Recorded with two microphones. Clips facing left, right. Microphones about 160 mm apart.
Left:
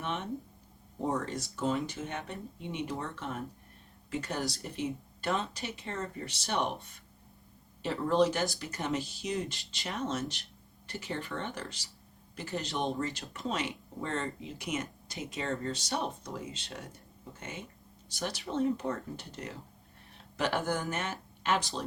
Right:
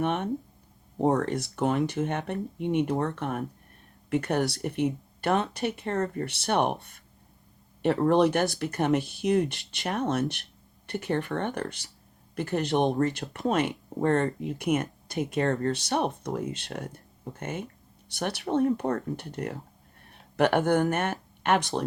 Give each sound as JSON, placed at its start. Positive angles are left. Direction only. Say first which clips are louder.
{"t": 0.0, "sound": "speech", "louder": "right 8 dB", "side_deg": -55}